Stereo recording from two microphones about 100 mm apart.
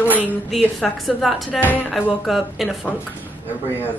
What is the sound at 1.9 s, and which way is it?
Speech, centre (ahead or behind).